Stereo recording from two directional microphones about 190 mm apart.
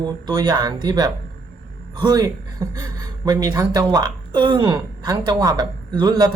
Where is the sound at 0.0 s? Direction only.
20° right (ahead or behind).